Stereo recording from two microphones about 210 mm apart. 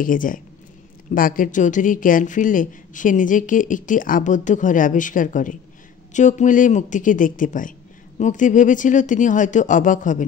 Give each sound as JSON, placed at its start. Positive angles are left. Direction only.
{"t": 0.0, "sound": "a woman's voice", "side_deg": 40}